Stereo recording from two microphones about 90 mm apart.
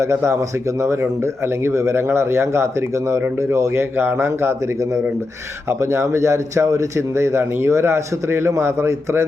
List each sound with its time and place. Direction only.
0.0 s a man's voice: 30° right (ahead or behind)